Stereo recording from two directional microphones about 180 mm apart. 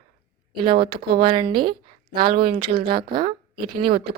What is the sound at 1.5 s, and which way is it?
Speech, 55° right (ahead or behind).